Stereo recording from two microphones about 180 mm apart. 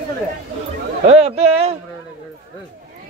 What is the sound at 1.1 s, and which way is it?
Speech, 35° right (ahead or behind).